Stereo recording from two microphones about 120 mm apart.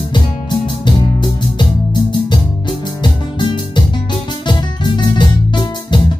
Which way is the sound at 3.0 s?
40° left (ahead or behind).